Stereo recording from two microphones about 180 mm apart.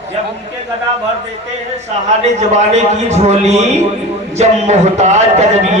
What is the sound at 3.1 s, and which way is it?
A man's voice, 40° right (ahead or behind).